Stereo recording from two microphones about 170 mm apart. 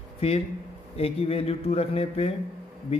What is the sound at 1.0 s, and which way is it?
A man's voice, 35° left (ahead or behind).